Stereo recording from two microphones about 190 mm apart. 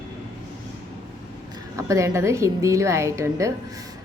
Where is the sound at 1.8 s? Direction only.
15° right (ahead or behind).